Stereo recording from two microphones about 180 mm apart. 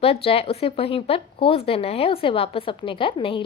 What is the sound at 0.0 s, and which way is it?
A woman's voice, 30° left (ahead or behind).